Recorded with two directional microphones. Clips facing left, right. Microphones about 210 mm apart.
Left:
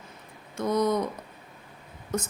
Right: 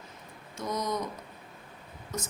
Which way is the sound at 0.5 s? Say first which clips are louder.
Left 8 dB; 60° left (ahead or behind).